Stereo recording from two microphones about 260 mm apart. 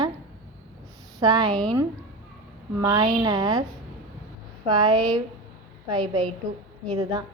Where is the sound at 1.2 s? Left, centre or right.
Centre.